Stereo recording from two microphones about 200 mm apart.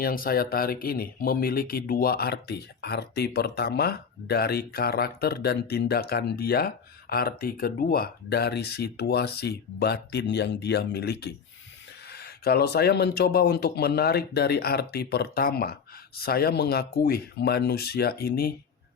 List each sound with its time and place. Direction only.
0.0 s speech: 45° left (ahead or behind)